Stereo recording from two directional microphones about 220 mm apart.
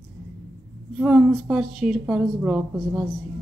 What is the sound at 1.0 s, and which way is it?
A woman's voice, 5° right (ahead or behind).